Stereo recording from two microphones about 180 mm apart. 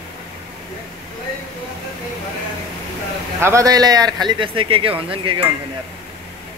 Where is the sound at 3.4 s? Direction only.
15° right (ahead or behind).